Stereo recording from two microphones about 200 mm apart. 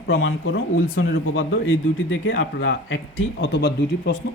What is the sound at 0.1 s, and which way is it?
Speech, 75° left (ahead or behind).